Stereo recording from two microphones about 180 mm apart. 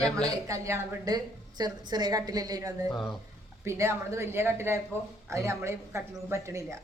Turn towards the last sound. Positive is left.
turn(degrees=-15)  # may be behind; listen again after turning